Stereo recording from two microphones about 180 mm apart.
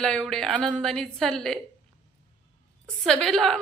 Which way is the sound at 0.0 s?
5° left (ahead or behind).